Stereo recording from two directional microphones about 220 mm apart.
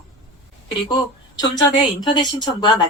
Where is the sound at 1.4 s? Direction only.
20° left (ahead or behind).